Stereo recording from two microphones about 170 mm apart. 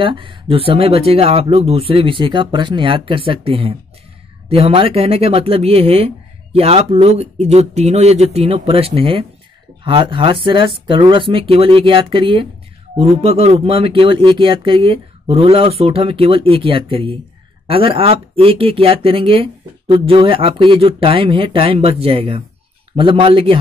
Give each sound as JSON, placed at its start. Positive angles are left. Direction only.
{"t": 0.0, "sound": "speech", "side_deg": -30}